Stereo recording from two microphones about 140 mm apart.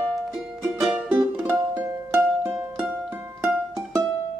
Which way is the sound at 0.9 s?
10° right (ahead or behind).